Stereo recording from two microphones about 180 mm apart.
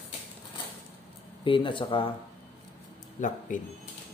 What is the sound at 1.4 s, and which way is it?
Speech, 30° left (ahead or behind).